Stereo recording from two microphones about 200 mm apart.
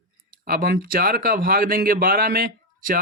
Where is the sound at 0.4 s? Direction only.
45° right (ahead or behind).